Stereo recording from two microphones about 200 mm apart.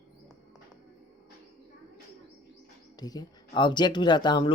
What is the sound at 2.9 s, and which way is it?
Speech, 20° left (ahead or behind).